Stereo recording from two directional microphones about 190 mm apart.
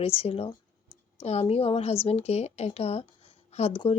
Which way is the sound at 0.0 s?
30° left (ahead or behind).